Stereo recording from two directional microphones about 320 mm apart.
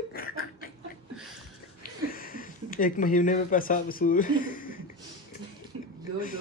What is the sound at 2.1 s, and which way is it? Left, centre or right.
Speech, left.